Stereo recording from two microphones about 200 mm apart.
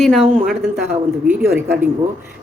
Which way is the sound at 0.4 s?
5° right (ahead or behind).